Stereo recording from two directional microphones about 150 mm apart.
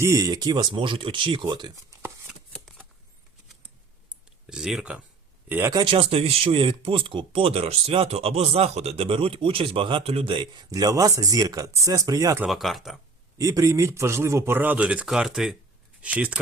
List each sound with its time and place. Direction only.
0.0 s speech: 20° right (ahead or behind)
2.0 s chopping: 15° right (ahead or behind)
2.7 s a sound: centre (ahead or behind)
4.1 s a sound: 5° right (ahead or behind)
5.5 s a man's voice: 15° right (ahead or behind)
5.7 s speech: 35° right (ahead or behind); by 12.5 s 20° right (ahead or behind)
12.5 s speech: centre (ahead or behind)
13.4 s a man's voice: 20° right (ahead or behind)